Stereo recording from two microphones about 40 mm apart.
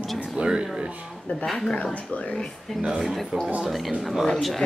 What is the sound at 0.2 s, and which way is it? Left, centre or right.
Speech, right.